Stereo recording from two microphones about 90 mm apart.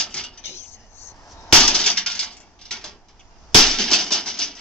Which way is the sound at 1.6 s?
10° left (ahead or behind).